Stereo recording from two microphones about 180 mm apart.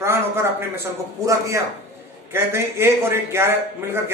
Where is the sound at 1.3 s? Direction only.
15° right (ahead or behind).